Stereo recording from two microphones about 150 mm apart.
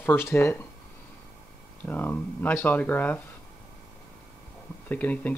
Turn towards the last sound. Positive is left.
turn(degrees=10)  # may be behind; listen again after turning